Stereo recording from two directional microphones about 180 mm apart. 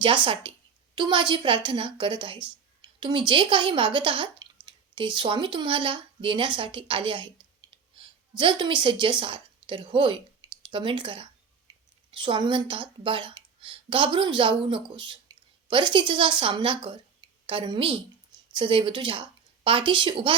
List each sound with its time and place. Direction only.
0.0 s speech: 25° right (ahead or behind)
11.7 s a sound: 25° right (ahead or behind)
12.1 s a woman's voice: 25° right (ahead or behind)